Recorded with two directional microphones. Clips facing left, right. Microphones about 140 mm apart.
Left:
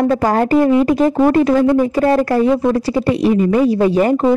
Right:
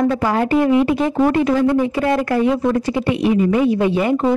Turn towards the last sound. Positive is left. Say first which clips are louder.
# left 3 dB
turn(degrees=40)  # may be behind; listen again after turning